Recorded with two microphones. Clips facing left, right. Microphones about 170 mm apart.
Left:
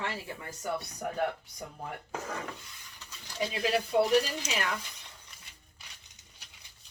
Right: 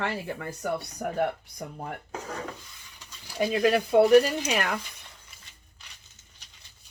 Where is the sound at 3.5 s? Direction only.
55° right (ahead or behind).